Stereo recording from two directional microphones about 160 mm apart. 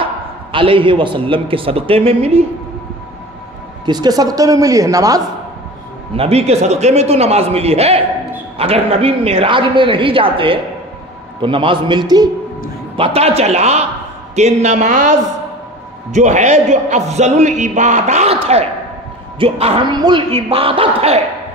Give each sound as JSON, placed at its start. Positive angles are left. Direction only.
{"t": 0.0, "sound": "a man's voice", "side_deg": -35}
{"t": 3.8, "sound": "speech", "side_deg": -25}
{"t": 6.1, "sound": "a man's voice", "side_deg": -40}